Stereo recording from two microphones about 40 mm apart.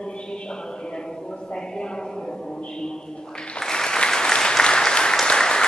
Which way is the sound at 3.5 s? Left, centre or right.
Centre.